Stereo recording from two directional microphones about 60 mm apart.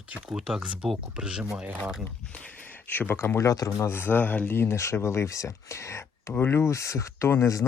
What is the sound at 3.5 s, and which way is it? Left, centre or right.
Speech, left.